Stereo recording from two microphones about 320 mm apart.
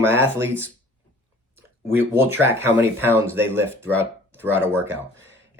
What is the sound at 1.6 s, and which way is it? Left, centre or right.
Speech, centre.